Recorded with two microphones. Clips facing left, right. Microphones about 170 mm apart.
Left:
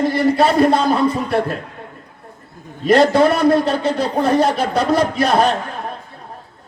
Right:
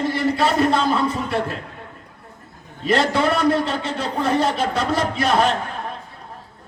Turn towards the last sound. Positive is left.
turn(degrees=40)  # may be behind; listen again after turning